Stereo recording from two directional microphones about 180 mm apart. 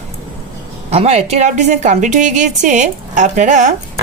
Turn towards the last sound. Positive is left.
turn(degrees=-40)  # may be behind; listen again after turning